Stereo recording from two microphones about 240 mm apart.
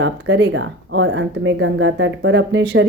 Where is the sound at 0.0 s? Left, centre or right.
Right.